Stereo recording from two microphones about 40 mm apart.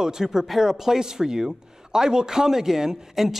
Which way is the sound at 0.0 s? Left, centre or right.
Centre.